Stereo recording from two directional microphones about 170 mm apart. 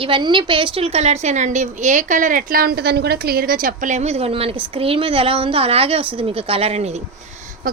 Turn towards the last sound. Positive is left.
turn(degrees=-55)  # may be behind; listen again after turning